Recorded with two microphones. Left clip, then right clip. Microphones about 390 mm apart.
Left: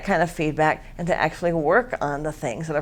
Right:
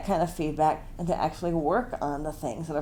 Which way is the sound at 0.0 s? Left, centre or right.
Left.